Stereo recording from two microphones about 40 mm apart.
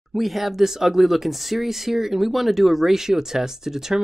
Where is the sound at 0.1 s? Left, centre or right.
Centre.